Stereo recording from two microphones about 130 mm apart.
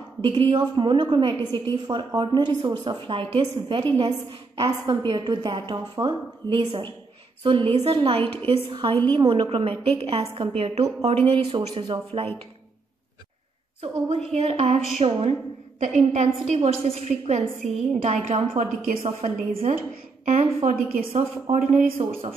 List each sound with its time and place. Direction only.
0.2 s a woman's voice: 40° right (ahead or behind)
8.2 s a woman's voice: 15° left (ahead or behind)
8.6 s a woman's voice: 40° right (ahead or behind)
13.7 s a woman's voice: 50° right (ahead or behind)
15.8 s a woman's voice: 65° right (ahead or behind)
18.0 s a woman's voice: 50° right (ahead or behind)
18.9 s a woman's voice: 65° right (ahead or behind)
20.3 s a woman's voice: 75° right (ahead or behind)